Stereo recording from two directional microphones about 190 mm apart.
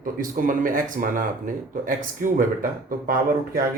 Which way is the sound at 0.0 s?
45° right (ahead or behind).